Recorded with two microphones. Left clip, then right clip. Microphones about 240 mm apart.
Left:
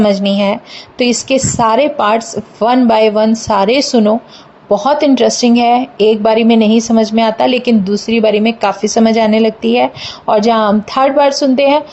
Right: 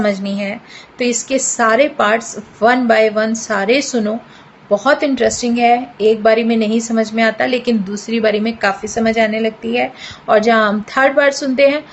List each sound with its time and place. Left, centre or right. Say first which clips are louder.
0.0 s a woman's voice: left 7 dB; left